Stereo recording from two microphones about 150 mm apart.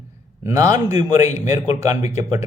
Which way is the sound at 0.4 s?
20° right (ahead or behind).